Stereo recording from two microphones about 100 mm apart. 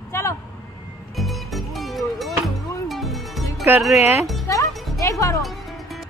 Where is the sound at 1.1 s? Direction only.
Centre (ahead or behind).